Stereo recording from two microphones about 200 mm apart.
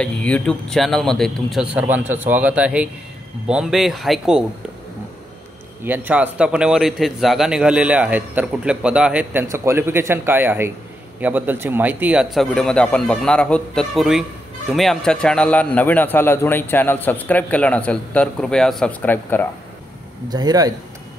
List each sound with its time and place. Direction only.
0.0 s speech: 5° left (ahead or behind)
5.9 s a man's voice: 10° right (ahead or behind); by 19.4 s 10° left (ahead or behind)
20.2 s speech: 20° right (ahead or behind)